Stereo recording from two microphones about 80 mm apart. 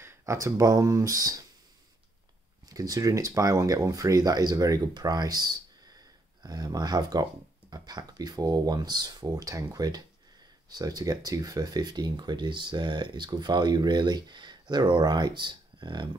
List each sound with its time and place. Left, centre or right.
0.0 s speech: right
2.7 s speech: right